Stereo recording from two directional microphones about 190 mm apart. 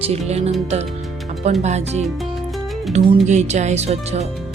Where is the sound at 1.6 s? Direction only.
35° right (ahead or behind).